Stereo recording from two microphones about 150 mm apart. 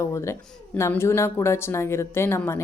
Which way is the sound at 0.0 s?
20° left (ahead or behind).